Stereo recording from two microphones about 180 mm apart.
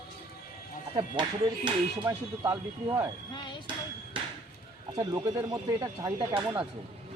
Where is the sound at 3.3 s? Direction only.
25° left (ahead or behind).